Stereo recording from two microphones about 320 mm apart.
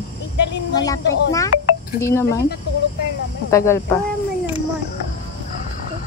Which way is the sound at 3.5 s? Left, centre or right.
Centre.